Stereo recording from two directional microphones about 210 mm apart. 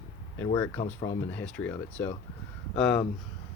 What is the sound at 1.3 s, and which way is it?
Speech, 5° left (ahead or behind).